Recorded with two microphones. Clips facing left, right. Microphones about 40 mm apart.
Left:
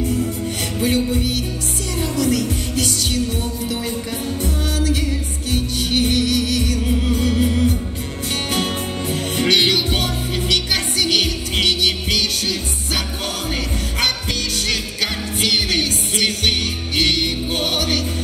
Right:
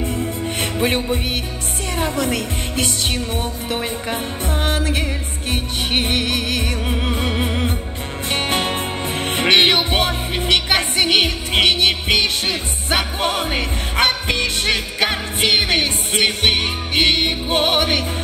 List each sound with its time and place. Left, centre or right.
0.0 s music: right
4.6 s music: right